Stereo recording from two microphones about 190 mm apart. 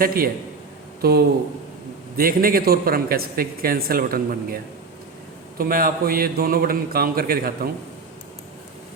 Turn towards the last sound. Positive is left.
turn(degrees=-50)  # may be behind; listen again after turning